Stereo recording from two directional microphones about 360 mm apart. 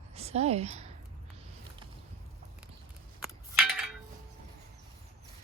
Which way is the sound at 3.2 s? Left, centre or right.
Centre.